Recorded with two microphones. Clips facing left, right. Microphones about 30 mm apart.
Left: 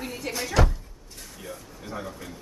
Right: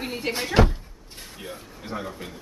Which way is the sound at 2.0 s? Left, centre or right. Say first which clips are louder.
Right 2 dB; right.